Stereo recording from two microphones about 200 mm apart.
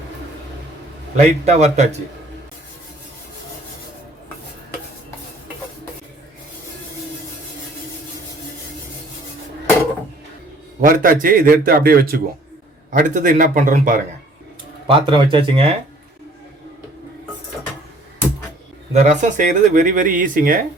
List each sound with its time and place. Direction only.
1.1 s speech: 35° right (ahead or behind)
10.8 s a man's voice: 45° right (ahead or behind)
14.8 s speech: 25° right (ahead or behind)
18.9 s speech: 35° right (ahead or behind)